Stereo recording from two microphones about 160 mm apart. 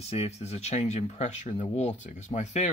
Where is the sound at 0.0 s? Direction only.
40° left (ahead or behind).